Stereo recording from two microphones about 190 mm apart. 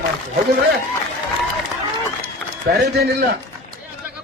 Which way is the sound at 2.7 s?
55° right (ahead or behind).